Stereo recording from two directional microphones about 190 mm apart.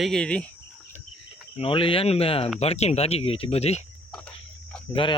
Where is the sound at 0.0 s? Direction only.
5° left (ahead or behind).